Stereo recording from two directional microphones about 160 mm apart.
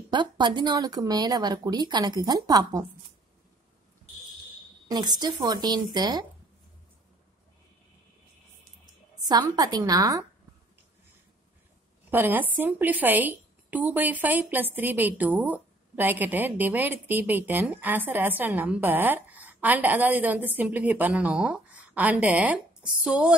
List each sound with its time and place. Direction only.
0.1 s speech: 30° right (ahead or behind)
4.8 s speech: 25° right (ahead or behind)
9.3 s speech: 25° right (ahead or behind)
12.1 s a woman's voice: 10° right (ahead or behind)